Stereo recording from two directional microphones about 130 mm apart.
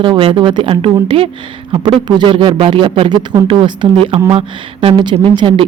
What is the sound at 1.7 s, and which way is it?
Speech, 35° right (ahead or behind).